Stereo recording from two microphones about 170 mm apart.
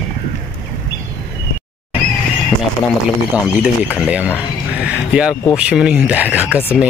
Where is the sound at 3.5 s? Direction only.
5° right (ahead or behind).